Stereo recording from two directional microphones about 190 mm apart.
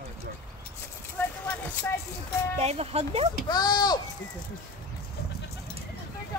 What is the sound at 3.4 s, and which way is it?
Speech, 20° left (ahead or behind).